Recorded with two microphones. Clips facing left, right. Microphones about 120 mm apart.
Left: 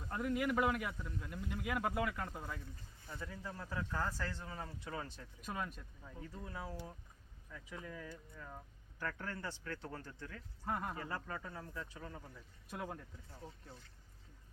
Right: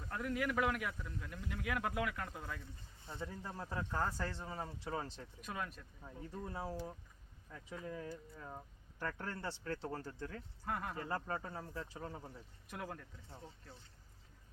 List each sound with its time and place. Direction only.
0.0 s a man's voice: 5° left (ahead or behind)
3.1 s speech: 25° right (ahead or behind)
5.5 s a man's voice: centre (ahead or behind)
6.3 s speech: 30° right (ahead or behind)
7.9 s speech: 30° right (ahead or behind)
10.7 s a man's voice: 5° left (ahead or behind)
11.1 s speech: 30° right (ahead or behind)
12.6 s speech: centre (ahead or behind)